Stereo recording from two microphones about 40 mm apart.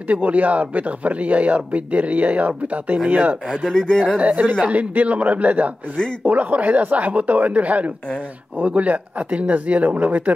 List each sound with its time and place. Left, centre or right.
0.1 s speech: right
3.7 s speech: centre
4.2 s speech: right